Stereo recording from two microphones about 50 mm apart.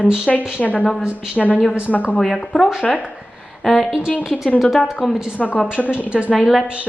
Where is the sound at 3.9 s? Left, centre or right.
Centre.